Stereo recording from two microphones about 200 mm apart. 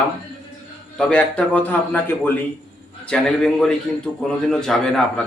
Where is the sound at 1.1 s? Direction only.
5° left (ahead or behind).